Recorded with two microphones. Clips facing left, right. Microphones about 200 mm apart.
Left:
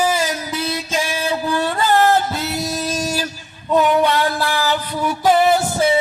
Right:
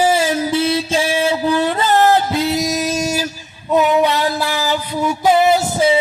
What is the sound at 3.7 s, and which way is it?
Music, 10° right (ahead or behind).